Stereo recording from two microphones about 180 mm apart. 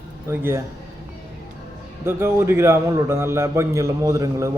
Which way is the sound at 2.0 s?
15° right (ahead or behind).